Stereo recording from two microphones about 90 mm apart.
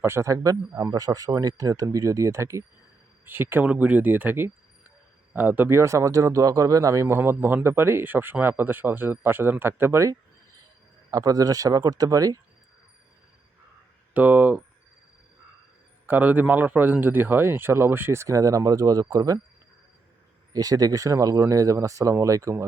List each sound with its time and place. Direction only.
0.0 s speech: 30° right (ahead or behind)
11.1 s speech: 45° right (ahead or behind)
14.1 s speech: 20° right (ahead or behind)
16.0 s speech: 20° right (ahead or behind); by 19.4 s 45° right (ahead or behind)
20.5 s speech: 45° right (ahead or behind)